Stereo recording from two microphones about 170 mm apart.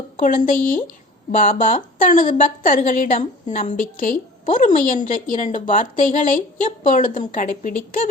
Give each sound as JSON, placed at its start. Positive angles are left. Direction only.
{"t": 0.2, "sound": "a woman's voice", "side_deg": 55}